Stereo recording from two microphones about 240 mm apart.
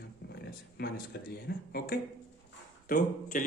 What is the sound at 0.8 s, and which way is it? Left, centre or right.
Speech, left.